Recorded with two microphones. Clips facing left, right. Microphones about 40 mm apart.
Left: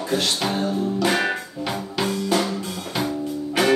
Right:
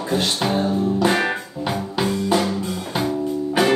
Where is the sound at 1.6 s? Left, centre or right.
Right.